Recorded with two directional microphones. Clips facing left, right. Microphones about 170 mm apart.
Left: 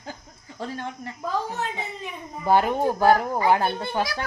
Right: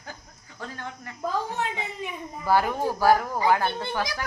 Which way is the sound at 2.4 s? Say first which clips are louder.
Left 3 dB; 20° left (ahead or behind).